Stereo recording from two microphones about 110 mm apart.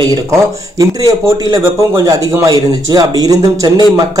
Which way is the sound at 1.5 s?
30° right (ahead or behind).